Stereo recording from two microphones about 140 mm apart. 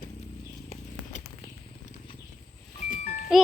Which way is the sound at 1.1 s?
60° left (ahead or behind).